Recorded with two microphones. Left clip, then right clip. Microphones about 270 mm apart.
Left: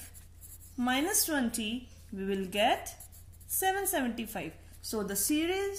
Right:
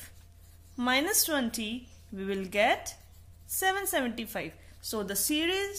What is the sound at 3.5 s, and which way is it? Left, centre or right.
Speech, right.